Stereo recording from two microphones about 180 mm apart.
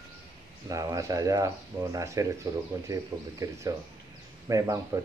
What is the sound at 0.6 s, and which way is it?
Speech, 20° right (ahead or behind).